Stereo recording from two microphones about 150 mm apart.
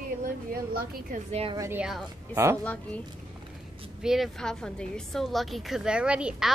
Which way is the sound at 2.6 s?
10° left (ahead or behind).